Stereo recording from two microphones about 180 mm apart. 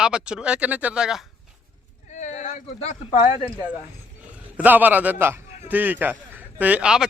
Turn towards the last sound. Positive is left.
turn(degrees=-5)  # may be behind; listen again after turning